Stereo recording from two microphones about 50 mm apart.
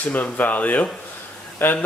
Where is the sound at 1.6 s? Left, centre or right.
Left.